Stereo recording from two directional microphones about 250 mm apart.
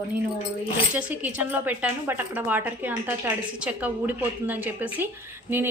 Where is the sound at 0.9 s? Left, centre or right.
Centre.